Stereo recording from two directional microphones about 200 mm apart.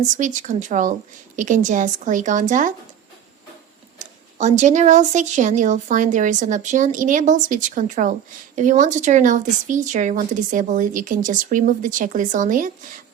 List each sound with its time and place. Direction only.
0.2 s speech: 40° right (ahead or behind)
3.9 s speech: 35° right (ahead or behind)